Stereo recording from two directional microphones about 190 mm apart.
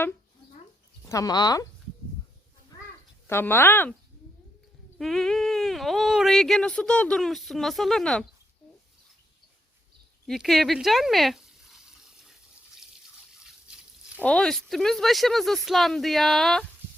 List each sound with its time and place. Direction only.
1.0 s speech: 15° left (ahead or behind)
2.7 s a sound: 20° left (ahead or behind)
3.2 s speech: 10° left (ahead or behind)
4.9 s speech: centre (ahead or behind)
10.2 s frying: centre (ahead or behind)
14.2 s speech: 5° left (ahead or behind)